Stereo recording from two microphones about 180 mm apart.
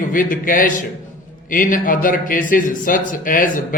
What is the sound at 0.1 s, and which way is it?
A man's voice, 50° left (ahead or behind).